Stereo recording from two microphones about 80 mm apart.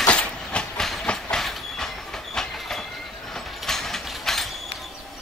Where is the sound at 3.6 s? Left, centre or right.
Centre.